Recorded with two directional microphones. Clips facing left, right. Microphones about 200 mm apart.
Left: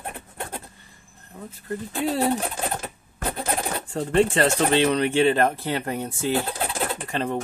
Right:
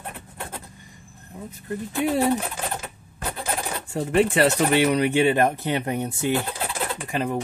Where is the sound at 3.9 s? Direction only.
15° right (ahead or behind).